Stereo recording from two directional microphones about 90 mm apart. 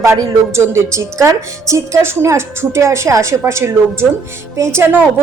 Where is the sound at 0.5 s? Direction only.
30° right (ahead or behind).